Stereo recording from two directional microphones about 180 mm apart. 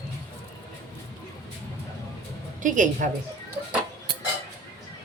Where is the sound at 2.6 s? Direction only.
45° right (ahead or behind).